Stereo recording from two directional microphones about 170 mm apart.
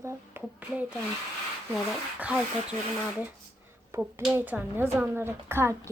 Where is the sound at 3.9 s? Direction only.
10° right (ahead or behind).